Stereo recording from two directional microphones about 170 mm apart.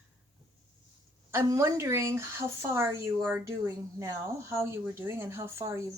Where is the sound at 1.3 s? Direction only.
15° right (ahead or behind).